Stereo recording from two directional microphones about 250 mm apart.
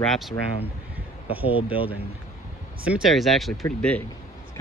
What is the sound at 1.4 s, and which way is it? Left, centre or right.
Speech, left.